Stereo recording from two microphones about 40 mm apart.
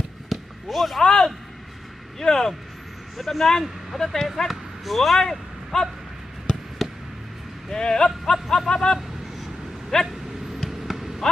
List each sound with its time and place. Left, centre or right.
0.3 s basketball bounce: centre
1.0 s a man's voice: centre
5.7 s snicker: centre
6.8 s a sound: centre
7.7 s speech: centre
8.3 s snicker: centre
9.9 s speech: centre
10.7 s basketball bounce: centre